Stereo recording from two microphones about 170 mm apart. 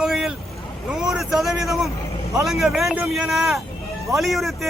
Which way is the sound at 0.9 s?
5° right (ahead or behind).